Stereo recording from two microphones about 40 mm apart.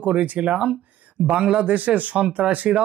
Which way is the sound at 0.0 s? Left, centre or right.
Right.